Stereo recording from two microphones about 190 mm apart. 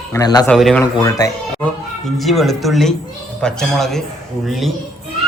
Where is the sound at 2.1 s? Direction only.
Centre (ahead or behind).